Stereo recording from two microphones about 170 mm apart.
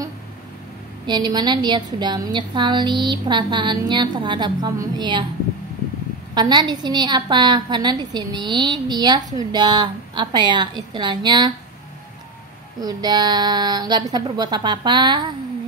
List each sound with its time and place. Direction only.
1.0 s a woman's voice: 25° right (ahead or behind)
6.3 s a woman's voice: 25° right (ahead or behind)
12.8 s a woman's voice: 25° right (ahead or behind)